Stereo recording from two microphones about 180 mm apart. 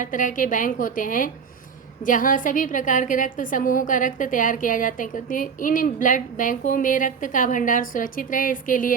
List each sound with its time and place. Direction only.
0.0 s a woman's voice: 45° left (ahead or behind)